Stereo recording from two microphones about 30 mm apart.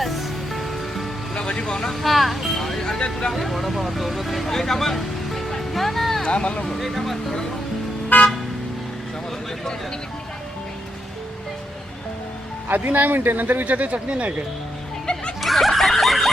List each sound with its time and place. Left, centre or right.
0.0 s music: centre
1.4 s speech: left
1.9 s speech: centre
2.6 s speech: centre
3.0 s speech: left
3.3 s speech: centre
4.4 s music: centre
6.2 s speech: left
6.7 s speech: centre
12.7 s a man's voice: right
13.7 s speech: right
15.0 s speech: left
15.4 s snicker: centre